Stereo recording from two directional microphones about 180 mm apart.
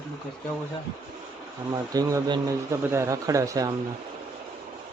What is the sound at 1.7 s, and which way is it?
A man's voice, 20° right (ahead or behind).